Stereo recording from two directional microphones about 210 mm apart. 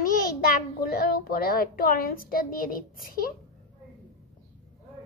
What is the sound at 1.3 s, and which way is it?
A child's voice, 45° left (ahead or behind).